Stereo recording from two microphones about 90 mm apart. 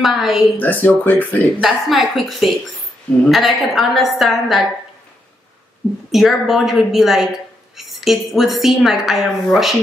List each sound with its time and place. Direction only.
0.0 s a woman's voice: centre (ahead or behind)
0.6 s speech: 20° left (ahead or behind)
1.6 s a woman's voice: centre (ahead or behind)
6.1 s a woman's voice: 5° right (ahead or behind)